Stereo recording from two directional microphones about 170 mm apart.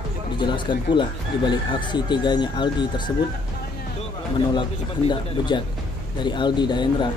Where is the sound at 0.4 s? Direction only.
25° left (ahead or behind).